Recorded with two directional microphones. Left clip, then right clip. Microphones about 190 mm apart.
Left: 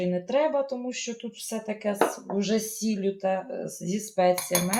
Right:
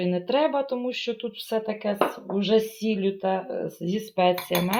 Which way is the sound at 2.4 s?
20° right (ahead or behind).